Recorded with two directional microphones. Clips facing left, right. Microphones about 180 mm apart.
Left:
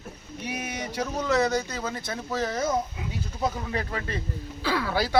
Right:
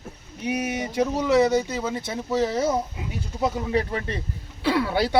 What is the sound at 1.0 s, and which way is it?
Speech, 15° right (ahead or behind).